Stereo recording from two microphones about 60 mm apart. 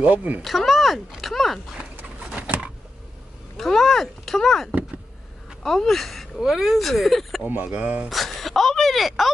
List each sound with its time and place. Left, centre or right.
0.0 s speech: right
0.4 s a child's voice: centre
2.1 s a sound: centre
3.5 s speech: centre
6.4 s speech: centre
7.4 s speech: right
8.1 s a sound: centre